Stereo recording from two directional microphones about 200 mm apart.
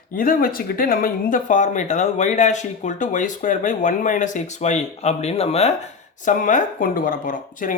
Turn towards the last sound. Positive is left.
turn(degrees=40)  # may be behind; listen again after turning